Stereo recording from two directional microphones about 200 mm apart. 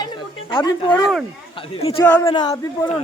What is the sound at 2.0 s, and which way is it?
Speech, 10° left (ahead or behind).